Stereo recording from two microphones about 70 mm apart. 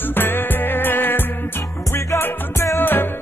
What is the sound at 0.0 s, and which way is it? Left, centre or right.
Music, left.